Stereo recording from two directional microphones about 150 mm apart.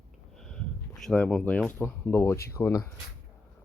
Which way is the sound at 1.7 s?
15° left (ahead or behind).